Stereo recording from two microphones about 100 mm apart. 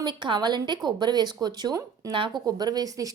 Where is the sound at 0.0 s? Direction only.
50° right (ahead or behind).